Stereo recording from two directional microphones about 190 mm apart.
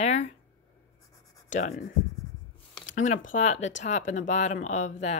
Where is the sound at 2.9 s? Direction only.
40° left (ahead or behind).